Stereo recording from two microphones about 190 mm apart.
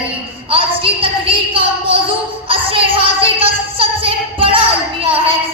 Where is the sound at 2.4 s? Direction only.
30° right (ahead or behind).